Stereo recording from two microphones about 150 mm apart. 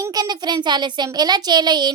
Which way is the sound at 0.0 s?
25° right (ahead or behind).